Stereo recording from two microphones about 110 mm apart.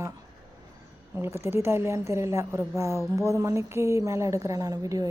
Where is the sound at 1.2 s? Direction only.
25° right (ahead or behind).